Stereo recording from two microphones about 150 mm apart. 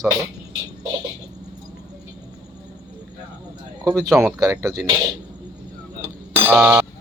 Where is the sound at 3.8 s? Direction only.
20° right (ahead or behind).